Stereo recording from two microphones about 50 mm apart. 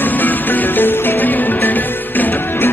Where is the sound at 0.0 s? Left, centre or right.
Left.